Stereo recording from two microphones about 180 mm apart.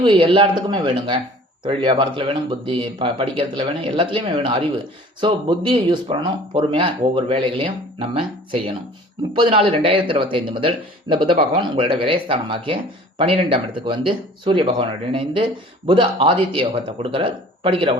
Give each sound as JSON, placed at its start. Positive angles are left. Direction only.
{"t": 0.0, "sound": "speech", "side_deg": -30}